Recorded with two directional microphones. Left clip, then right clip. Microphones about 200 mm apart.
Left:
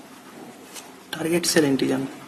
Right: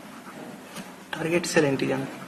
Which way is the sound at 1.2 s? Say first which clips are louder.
Left 2 dB; 60° left (ahead or behind).